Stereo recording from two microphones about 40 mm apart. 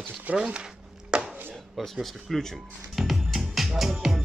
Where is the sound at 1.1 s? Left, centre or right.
Right.